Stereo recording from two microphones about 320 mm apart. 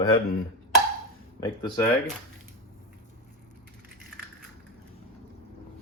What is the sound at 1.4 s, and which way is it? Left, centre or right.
Speech, centre.